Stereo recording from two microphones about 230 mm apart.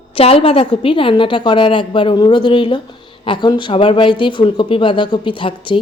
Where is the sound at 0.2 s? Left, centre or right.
Left.